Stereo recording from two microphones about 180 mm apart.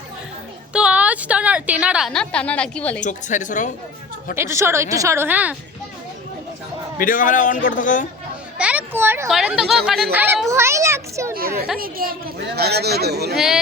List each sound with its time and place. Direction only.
0.7 s a woman's voice: 5° right (ahead or behind)
3.0 s a man's voice: 45° left (ahead or behind)
4.4 s a woman's voice: 15° right (ahead or behind)
7.0 s a man's voice: 50° left (ahead or behind)
8.5 s a sound: 10° right (ahead or behind)
9.3 s a woman's voice: centre (ahead or behind)
11.3 s a woman's voice: 55° right (ahead or behind)
13.3 s speech: centre (ahead or behind)